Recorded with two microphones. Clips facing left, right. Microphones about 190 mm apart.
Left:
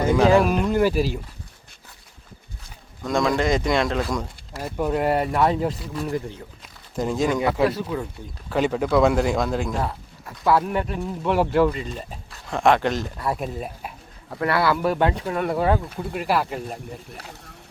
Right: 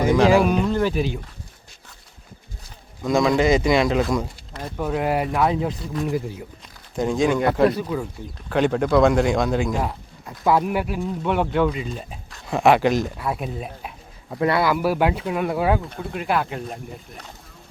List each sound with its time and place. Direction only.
0.3 s speech: centre (ahead or behind)
3.0 s speech: centre (ahead or behind)
6.1 s speech: 10° right (ahead or behind)
6.9 s speech: centre (ahead or behind)
9.8 s speech: 15° right (ahead or behind)
10.7 s speech: 5° right (ahead or behind)
14.3 s speech: 20° right (ahead or behind)
14.8 s speech: 5° right (ahead or behind)